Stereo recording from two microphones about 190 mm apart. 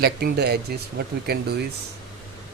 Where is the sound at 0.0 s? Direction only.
55° right (ahead or behind).